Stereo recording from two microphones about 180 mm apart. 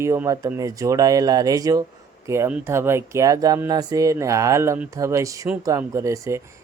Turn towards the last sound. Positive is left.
turn(degrees=-15)  # may be behind; listen again after turning